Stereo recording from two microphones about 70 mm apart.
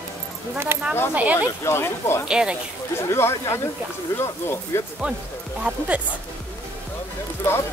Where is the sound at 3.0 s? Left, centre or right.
Left.